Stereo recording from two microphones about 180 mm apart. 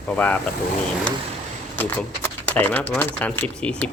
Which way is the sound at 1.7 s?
10° left (ahead or behind).